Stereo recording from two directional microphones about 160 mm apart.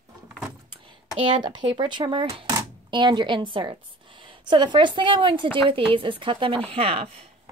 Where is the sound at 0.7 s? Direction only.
30° right (ahead or behind).